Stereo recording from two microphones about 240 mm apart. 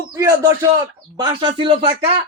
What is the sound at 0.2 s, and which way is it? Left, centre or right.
Speech, centre.